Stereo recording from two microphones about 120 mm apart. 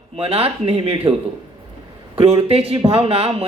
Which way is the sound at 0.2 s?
55° right (ahead or behind).